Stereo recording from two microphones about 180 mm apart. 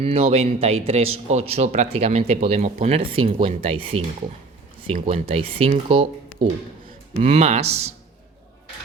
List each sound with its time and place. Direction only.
0.0 s speech: 35° right (ahead or behind)
5.0 s speech: 35° right (ahead or behind)